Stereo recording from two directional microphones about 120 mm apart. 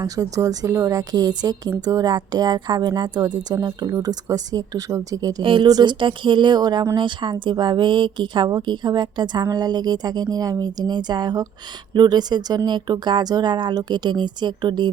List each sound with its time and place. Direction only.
0.0 s a woman's voice: 30° right (ahead or behind)
5.4 s speech: 45° right (ahead or behind)